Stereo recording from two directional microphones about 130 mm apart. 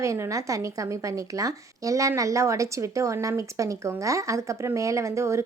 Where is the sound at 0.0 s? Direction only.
25° right (ahead or behind).